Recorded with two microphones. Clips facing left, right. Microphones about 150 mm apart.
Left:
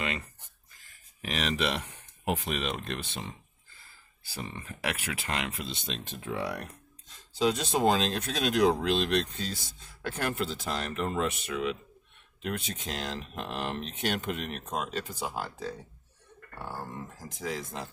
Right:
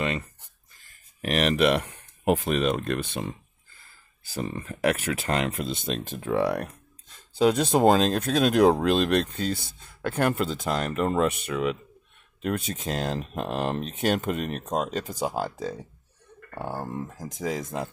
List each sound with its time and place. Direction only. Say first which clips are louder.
1.2 s speech: right 8 dB; 55° right (ahead or behind)
4.2 s speech: right 8 dB; 40° right (ahead or behind)